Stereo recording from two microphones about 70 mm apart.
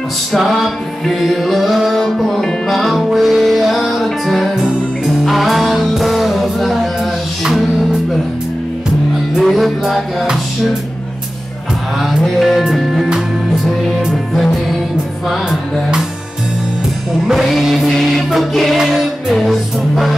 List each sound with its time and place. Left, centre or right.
0.3 s music: centre
9.4 s music: centre
12.2 s music: centre
14.3 s music: centre
17.3 s music: centre